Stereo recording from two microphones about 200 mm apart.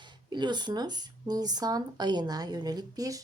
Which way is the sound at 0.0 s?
20° right (ahead or behind).